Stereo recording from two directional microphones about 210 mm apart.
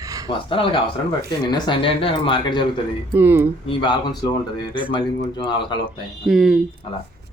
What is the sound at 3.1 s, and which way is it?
Speech, 10° right (ahead or behind).